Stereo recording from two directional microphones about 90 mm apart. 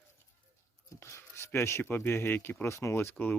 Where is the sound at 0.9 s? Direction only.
30° left (ahead or behind).